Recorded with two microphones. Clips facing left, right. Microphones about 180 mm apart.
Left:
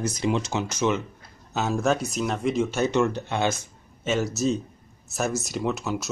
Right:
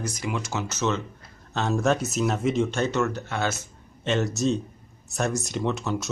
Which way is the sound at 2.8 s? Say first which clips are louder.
Left 3 dB; 15° left (ahead or behind).